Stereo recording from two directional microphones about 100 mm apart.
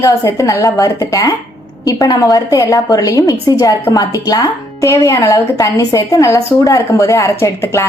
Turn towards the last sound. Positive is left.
turn(degrees=25)  # may be behind; listen again after turning